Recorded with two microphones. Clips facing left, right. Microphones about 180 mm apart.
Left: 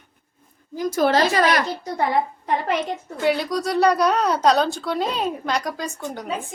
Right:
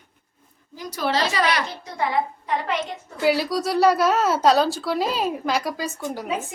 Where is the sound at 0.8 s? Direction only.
50° left (ahead or behind).